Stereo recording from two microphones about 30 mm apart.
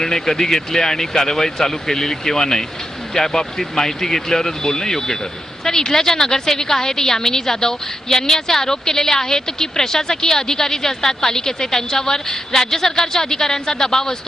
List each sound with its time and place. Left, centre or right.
0.0 s a woman's voice: centre